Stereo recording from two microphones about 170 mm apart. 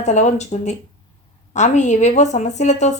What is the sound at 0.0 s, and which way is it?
Speech, 45° left (ahead or behind).